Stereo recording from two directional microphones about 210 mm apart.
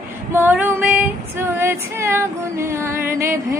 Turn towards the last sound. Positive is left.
turn(degrees=-10)  # may be behind; listen again after turning